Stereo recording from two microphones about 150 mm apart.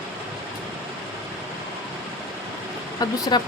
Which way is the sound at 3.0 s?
25° left (ahead or behind).